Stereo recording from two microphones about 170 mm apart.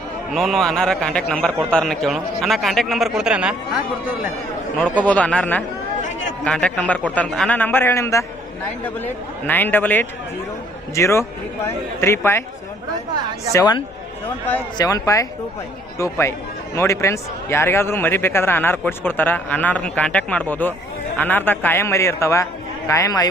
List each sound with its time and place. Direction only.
0.3 s a man's voice: centre (ahead or behind)
4.9 s a man's voice: 10° left (ahead or behind)
9.5 s a man's voice: 10° left (ahead or behind)
13.5 s a man's voice: 25° left (ahead or behind)